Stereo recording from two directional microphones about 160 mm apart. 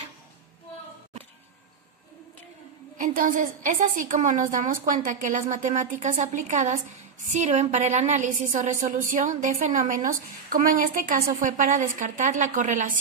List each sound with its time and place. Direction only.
3.0 s a woman's voice: 60° right (ahead or behind)